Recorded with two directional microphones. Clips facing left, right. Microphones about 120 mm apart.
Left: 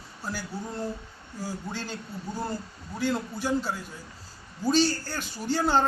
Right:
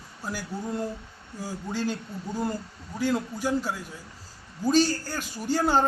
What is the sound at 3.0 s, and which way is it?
Speech, 10° right (ahead or behind).